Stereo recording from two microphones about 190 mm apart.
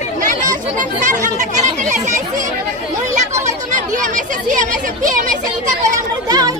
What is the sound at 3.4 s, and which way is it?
Speech, 40° right (ahead or behind).